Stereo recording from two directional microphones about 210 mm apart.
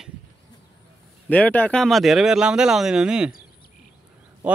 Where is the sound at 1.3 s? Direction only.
5° left (ahead or behind).